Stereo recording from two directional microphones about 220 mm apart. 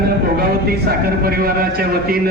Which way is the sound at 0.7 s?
45° right (ahead or behind).